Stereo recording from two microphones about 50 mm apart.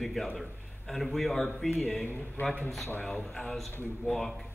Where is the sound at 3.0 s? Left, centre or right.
Centre.